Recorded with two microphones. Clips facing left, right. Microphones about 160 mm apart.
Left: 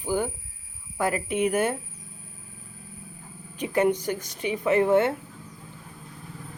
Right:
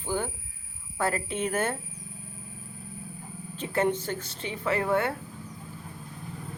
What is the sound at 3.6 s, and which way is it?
Speech, 15° left (ahead or behind).